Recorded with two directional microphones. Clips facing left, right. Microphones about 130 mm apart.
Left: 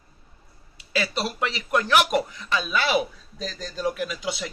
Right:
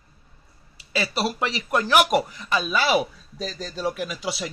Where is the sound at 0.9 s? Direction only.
5° right (ahead or behind).